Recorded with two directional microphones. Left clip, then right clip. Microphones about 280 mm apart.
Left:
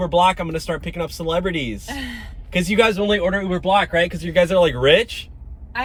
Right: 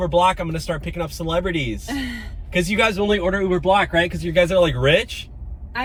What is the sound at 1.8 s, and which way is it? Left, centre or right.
Speech, centre.